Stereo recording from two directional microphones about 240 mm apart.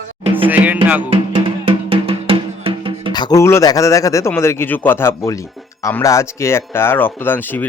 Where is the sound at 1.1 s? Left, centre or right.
Right.